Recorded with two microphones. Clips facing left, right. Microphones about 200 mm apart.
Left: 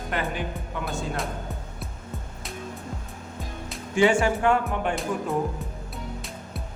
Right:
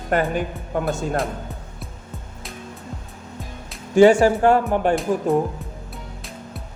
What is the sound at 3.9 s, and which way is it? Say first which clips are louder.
Speech: right 8 dB; 40° right (ahead or behind).